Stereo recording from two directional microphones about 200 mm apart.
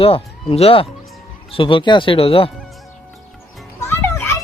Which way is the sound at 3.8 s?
10° left (ahead or behind).